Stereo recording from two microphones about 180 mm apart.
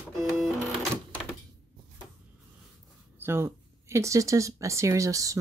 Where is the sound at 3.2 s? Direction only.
15° right (ahead or behind).